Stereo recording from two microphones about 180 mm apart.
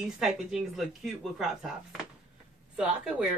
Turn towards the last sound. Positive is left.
turn(degrees=-5)  # may be behind; listen again after turning